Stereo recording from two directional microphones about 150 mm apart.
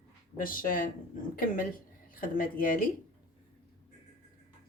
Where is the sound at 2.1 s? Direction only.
70° left (ahead or behind).